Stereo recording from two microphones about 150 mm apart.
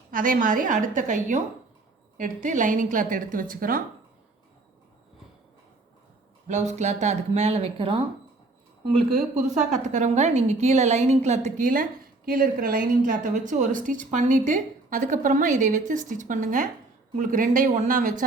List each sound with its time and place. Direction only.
0.1 s a woman's voice: 65° right (ahead or behind)
6.5 s speech: 50° right (ahead or behind)
9.6 s a woman's voice: 50° right (ahead or behind)